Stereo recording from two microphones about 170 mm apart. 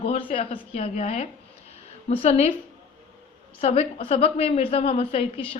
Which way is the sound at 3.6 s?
35° left (ahead or behind).